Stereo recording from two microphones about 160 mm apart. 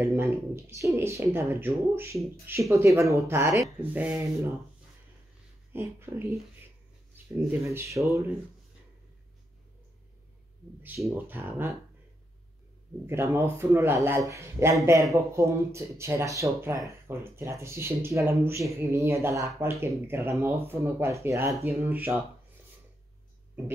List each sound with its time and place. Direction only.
0.0 s speech: 15° right (ahead or behind)
5.7 s speech: 15° right (ahead or behind)
11.1 s speech: 15° right (ahead or behind)
13.0 s speech: 15° right (ahead or behind)